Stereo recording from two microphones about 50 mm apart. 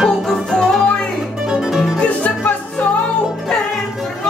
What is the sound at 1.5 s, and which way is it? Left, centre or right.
Music, centre.